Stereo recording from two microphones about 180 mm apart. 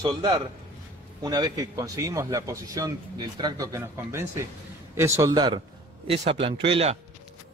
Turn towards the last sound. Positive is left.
turn(degrees=-30)  # may be behind; listen again after turning